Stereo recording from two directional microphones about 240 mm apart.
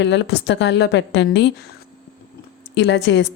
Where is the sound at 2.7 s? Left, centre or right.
Left.